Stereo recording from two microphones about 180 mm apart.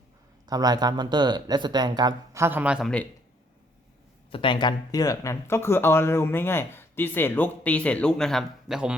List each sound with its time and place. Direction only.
0.4 s speech: 20° right (ahead or behind); by 2.9 s 5° right (ahead or behind)
4.3 s speech: 30° left (ahead or behind); by 9.0 s 5° right (ahead or behind)